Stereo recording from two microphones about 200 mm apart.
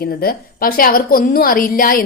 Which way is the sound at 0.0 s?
50° left (ahead or behind).